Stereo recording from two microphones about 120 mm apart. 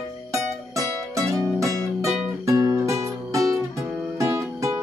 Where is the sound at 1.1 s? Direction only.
25° right (ahead or behind).